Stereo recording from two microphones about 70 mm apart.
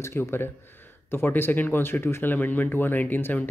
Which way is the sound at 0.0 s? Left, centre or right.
Left.